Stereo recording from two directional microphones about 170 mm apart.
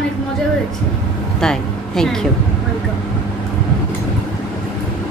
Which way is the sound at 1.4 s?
5° left (ahead or behind).